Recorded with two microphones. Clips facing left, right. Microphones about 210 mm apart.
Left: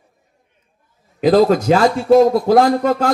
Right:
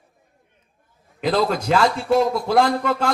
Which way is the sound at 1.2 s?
40° left (ahead or behind).